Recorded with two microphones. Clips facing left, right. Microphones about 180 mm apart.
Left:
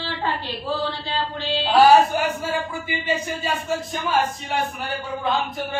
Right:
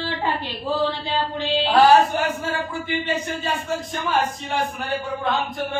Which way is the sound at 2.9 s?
10° left (ahead or behind).